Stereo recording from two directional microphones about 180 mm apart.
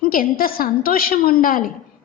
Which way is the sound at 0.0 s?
50° left (ahead or behind).